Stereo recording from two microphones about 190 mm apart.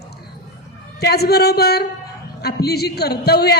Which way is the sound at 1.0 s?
55° left (ahead or behind).